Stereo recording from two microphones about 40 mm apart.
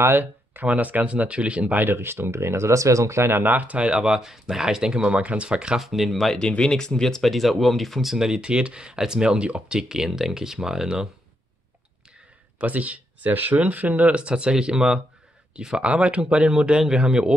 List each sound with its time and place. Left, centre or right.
0.1 s speech: right
0.7 s speech: right
1.0 s speech: right
1.8 s speech: right
3.4 s speech: right
3.9 s speech: centre
5.8 s speech: centre
6.1 s speech: centre
6.6 s speech: centre
7.2 s speech: centre
8.1 s speech: centre
9.8 s speech: centre
12.5 s speech: right
14.1 s speech: right